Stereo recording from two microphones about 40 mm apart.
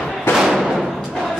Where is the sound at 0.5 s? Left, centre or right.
Centre.